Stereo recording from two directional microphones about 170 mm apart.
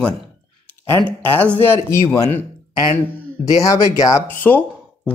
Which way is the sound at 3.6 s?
20° left (ahead or behind).